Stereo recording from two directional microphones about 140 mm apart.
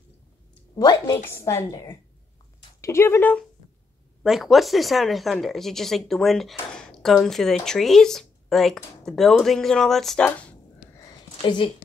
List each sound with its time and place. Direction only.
0.7 s speech: 30° left (ahead or behind)
1.2 s speech: 20° left (ahead or behind)
4.2 s speech: centre (ahead or behind)
11.4 s speech: 35° left (ahead or behind)